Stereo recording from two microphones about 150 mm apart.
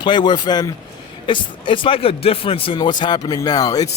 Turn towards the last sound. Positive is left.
turn(degrees=25)  # may be behind; listen again after turning